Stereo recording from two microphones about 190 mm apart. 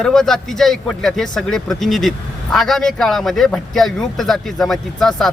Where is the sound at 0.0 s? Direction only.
5° left (ahead or behind).